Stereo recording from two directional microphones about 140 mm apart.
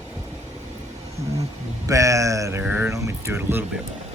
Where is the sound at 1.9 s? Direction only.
20° right (ahead or behind).